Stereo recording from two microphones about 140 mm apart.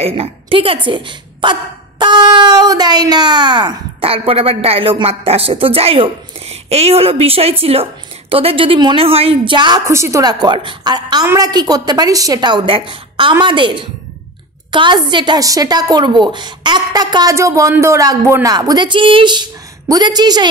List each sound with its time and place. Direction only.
0.0 s a woman's voice: 45° right (ahead or behind)
9.8 s a woman's voice: 20° right (ahead or behind)